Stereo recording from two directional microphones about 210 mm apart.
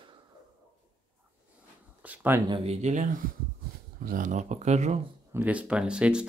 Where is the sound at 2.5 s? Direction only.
30° right (ahead or behind).